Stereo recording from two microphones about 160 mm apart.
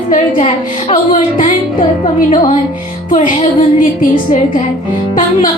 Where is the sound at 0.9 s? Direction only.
45° left (ahead or behind).